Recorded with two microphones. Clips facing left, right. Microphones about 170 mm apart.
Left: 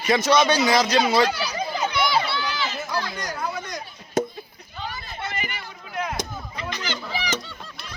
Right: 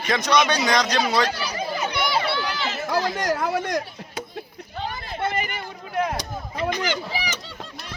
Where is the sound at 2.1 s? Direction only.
60° right (ahead or behind).